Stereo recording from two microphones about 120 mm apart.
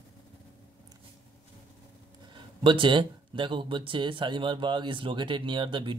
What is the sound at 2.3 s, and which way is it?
Speech, 45° right (ahead or behind).